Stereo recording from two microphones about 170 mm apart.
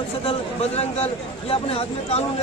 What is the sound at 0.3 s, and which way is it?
Speech, 40° left (ahead or behind).